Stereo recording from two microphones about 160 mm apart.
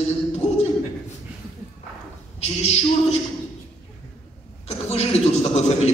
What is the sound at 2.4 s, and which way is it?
Speech, 40° left (ahead or behind).